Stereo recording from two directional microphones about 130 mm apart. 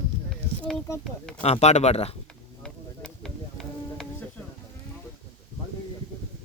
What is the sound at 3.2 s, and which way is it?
Music, 5° left (ahead or behind).